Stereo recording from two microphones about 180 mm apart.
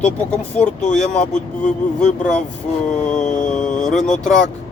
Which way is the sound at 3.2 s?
45° left (ahead or behind).